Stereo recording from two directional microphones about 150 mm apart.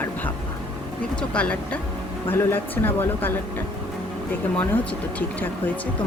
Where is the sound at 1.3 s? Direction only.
10° left (ahead or behind).